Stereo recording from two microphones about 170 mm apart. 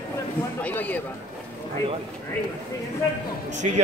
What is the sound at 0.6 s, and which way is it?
Speech, 10° left (ahead or behind).